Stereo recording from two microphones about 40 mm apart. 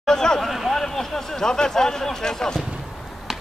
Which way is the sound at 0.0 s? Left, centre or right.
Centre.